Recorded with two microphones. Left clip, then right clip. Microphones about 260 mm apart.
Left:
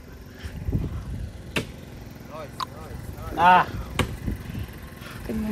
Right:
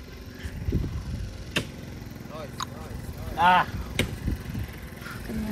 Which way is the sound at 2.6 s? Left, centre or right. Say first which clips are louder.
Left 4 dB; centre.